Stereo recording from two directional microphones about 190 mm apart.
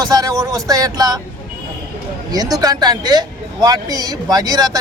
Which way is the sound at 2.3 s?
20° right (ahead or behind).